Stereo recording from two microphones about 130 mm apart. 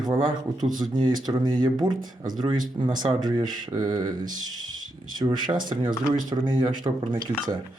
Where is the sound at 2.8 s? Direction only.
35° right (ahead or behind).